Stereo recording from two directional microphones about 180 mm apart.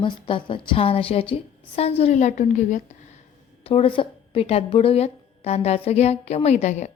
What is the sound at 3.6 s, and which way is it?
A woman's voice, 30° left (ahead or behind).